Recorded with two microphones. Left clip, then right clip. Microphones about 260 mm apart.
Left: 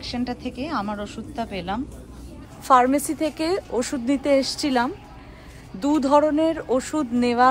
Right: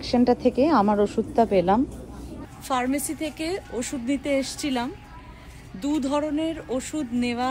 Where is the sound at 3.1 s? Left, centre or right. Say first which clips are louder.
Left 5 dB; centre.